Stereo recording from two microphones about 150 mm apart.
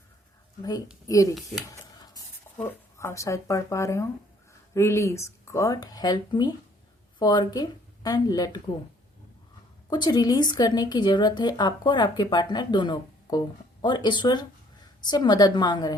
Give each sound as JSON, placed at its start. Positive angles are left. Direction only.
{"t": 1.0, "sound": "a woman's voice", "side_deg": 20}
{"t": 1.4, "sound": "speech", "side_deg": 0}
{"t": 1.7, "sound": "a sound", "side_deg": 25}
{"t": 2.6, "sound": "a woman's voice", "side_deg": 15}
{"t": 9.9, "sound": "a woman's voice", "side_deg": 30}